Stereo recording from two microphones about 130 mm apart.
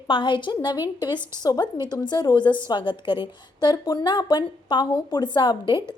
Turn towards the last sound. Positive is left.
turn(degrees=40)  # may be behind; listen again after turning